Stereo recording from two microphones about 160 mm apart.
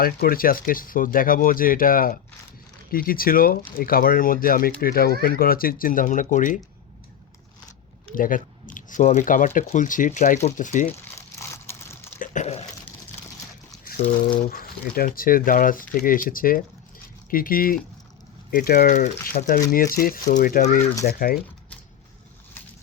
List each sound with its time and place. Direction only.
0.0 s speech: 65° left (ahead or behind)
8.1 s speech: 60° left (ahead or behind)
11.0 s a sound: 15° left (ahead or behind)
12.2 s a sound: 50° left (ahead or behind)
14.3 s speech: 65° left (ahead or behind)
21.1 s speech: 70° left (ahead or behind)